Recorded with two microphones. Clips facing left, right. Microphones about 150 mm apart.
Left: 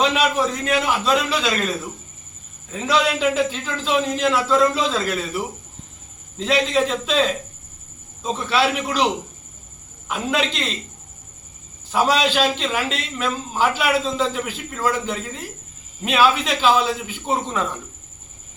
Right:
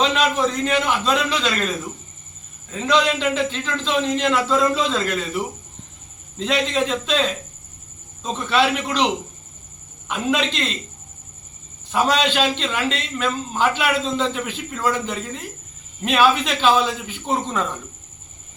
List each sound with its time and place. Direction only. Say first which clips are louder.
0.0 s a man's voice: even; 10° left (ahead or behind)
2.7 s a man's voice: right 1 dB; 5° left (ahead or behind)
10.1 s a man's voice: right 1 dB; centre (ahead or behind)
11.9 s a man's voice: left 1 dB; 5° left (ahead or behind)